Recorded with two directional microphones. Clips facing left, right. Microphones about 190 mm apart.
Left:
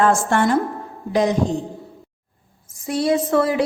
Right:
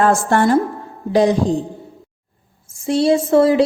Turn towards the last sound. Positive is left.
turn(degrees=-25)  # may be behind; listen again after turning